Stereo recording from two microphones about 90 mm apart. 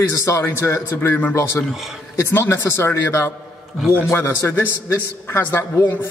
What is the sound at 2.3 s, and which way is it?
A man's voice, 25° left (ahead or behind).